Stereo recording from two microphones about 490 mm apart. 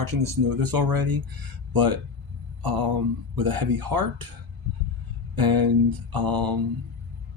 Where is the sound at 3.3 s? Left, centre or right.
Right.